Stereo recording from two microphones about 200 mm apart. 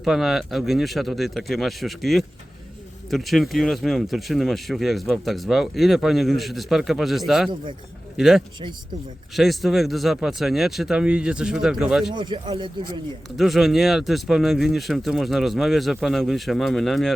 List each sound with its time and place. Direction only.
0.0 s speech: centre (ahead or behind)
12.1 s speech: 20° right (ahead or behind)
13.3 s speech: centre (ahead or behind)